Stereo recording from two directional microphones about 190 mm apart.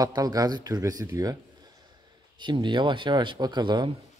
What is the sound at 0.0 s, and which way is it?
Speech, 20° right (ahead or behind).